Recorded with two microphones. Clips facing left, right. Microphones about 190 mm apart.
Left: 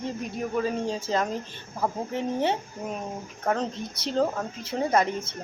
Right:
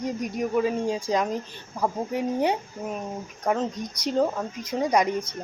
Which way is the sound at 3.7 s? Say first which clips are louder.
Right 3 dB; 30° left (ahead or behind).